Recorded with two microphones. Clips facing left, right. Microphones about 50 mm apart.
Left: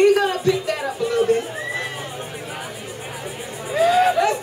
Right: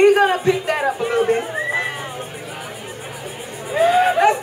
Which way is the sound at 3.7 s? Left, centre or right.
Centre.